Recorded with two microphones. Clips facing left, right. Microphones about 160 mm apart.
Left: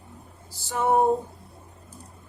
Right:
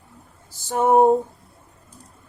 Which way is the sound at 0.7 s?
45° right (ahead or behind).